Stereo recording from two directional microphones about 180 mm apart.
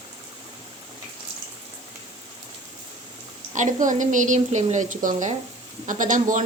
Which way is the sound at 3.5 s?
45° right (ahead or behind).